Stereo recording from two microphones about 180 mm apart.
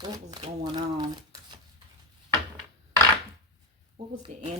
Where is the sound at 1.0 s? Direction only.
25° right (ahead or behind).